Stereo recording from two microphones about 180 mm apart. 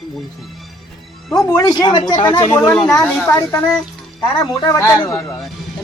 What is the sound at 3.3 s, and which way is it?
Speech, 15° left (ahead or behind).